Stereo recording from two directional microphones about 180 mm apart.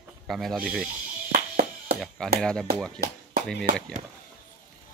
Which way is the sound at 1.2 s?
55° right (ahead or behind).